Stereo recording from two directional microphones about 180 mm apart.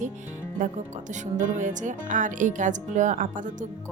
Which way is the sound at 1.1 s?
45° right (ahead or behind).